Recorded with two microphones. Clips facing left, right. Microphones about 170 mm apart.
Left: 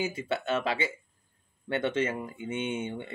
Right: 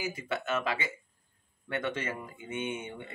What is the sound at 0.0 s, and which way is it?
Speech, 30° left (ahead or behind).